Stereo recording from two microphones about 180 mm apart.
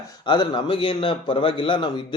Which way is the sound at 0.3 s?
25° left (ahead or behind).